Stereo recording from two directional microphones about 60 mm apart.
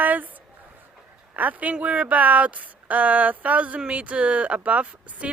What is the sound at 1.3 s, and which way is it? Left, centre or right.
Speech, right.